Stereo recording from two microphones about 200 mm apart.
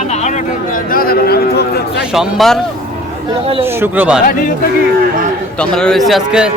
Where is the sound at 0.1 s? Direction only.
35° left (ahead or behind); by 1.8 s 55° left (ahead or behind).